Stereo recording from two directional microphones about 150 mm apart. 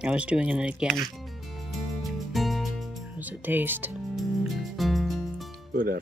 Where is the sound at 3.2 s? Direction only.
10° right (ahead or behind).